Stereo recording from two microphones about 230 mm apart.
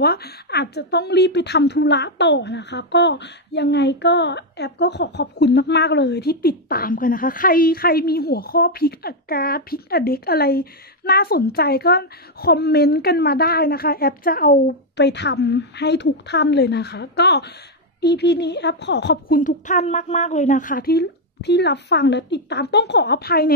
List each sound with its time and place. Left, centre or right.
0.0 s a woman's voice: left